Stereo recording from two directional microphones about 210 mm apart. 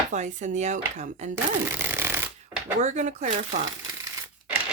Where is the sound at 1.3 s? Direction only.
10° right (ahead or behind).